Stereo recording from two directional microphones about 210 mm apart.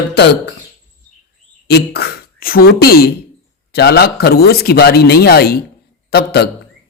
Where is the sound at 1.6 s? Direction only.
50° left (ahead or behind).